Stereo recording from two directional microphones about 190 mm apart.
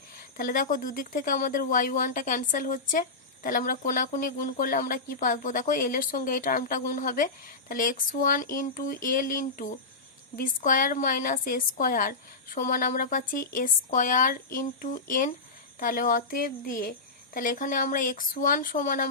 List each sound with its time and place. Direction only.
0.2 s speech: 45° left (ahead or behind)